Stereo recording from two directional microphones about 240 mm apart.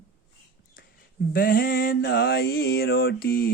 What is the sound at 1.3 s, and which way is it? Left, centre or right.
Mantra, left.